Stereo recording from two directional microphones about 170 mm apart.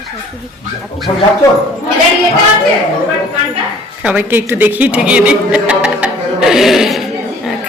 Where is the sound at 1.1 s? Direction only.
30° left (ahead or behind).